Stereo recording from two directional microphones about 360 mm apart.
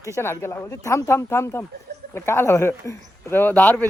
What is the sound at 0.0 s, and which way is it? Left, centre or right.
A man's voice, centre.